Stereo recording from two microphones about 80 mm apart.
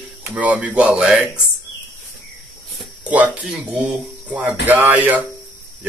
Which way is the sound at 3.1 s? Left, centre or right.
Centre.